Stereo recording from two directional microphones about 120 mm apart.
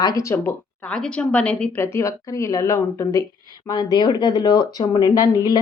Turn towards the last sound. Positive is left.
turn(degrees=35)  # may be behind; listen again after turning